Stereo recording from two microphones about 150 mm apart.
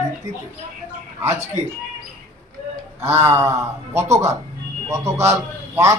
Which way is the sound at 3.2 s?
20° right (ahead or behind).